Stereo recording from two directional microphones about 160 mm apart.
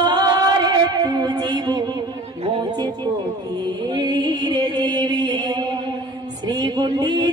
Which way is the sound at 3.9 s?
30° right (ahead or behind).